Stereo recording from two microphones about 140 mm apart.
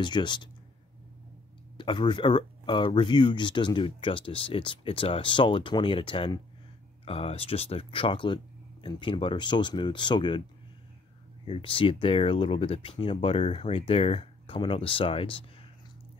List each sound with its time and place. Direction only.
0.0 s speech: 35° left (ahead or behind)
1.8 s speech: 35° left (ahead or behind)
11.4 s speech: 40° left (ahead or behind)